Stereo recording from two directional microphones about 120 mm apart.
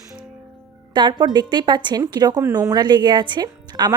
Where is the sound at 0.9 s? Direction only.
40° right (ahead or behind).